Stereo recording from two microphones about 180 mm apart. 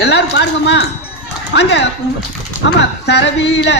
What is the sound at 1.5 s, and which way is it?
Speech, 90° left.